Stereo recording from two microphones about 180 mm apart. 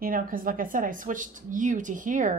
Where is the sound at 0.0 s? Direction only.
50° right (ahead or behind).